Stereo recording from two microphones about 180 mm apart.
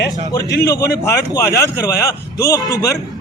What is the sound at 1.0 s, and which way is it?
A man's voice, 15° left (ahead or behind).